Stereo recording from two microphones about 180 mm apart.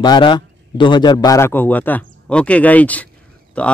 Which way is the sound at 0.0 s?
25° left (ahead or behind).